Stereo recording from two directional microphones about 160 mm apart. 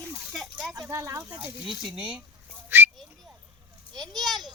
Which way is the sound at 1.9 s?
5° right (ahead or behind).